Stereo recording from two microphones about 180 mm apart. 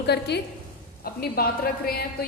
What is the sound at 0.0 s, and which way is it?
A woman's voice, 65° left (ahead or behind).